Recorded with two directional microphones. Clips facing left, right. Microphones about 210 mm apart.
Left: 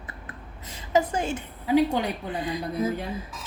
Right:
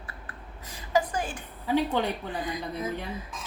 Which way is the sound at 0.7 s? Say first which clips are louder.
Left 3 dB; 25° left (ahead or behind).